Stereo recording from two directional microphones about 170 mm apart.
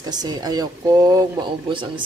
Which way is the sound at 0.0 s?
25° right (ahead or behind).